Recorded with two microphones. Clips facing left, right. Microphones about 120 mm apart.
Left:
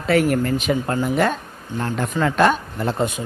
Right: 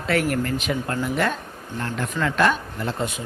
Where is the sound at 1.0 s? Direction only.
30° left (ahead or behind).